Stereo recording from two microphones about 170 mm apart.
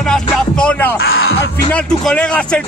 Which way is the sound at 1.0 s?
70° left (ahead or behind).